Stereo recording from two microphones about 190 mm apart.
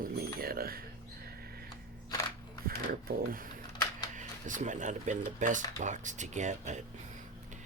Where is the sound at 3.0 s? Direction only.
50° right (ahead or behind).